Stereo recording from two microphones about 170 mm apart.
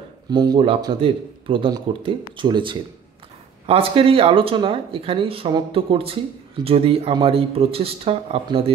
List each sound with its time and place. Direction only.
0.3 s speech: 25° right (ahead or behind)